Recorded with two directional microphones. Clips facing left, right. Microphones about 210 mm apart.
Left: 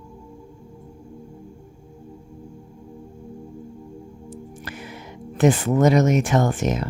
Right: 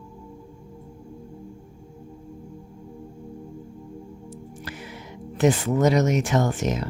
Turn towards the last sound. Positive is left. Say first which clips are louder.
# left 2 dB
turn(degrees=55)  # may be behind; listen again after turning